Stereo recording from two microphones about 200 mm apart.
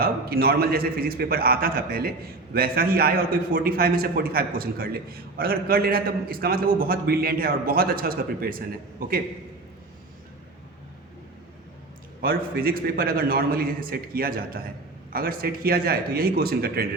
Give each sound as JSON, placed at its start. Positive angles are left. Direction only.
{"t": 0.0, "sound": "a man's voice", "side_deg": -50}
{"t": 12.2, "sound": "a man's voice", "side_deg": -45}